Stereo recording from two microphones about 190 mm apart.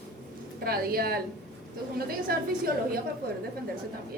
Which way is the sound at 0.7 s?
55° right (ahead or behind).